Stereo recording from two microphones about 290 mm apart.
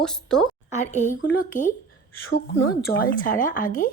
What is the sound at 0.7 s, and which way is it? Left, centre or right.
Speech, left.